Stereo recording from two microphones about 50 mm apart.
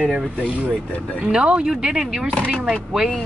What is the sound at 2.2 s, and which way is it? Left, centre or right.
Speech, centre.